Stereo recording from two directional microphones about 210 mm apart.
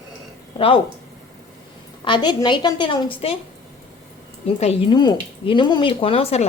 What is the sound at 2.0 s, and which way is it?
Speech, 20° left (ahead or behind).